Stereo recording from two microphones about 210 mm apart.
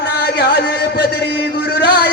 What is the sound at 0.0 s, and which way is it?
Music, 50° left (ahead or behind).